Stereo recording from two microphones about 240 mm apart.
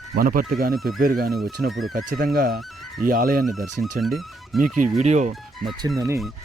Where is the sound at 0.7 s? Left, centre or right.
Centre.